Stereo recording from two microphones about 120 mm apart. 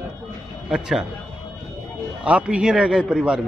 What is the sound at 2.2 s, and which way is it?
A man's voice, 10° right (ahead or behind).